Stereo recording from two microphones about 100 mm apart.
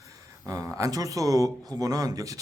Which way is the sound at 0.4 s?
30° right (ahead or behind).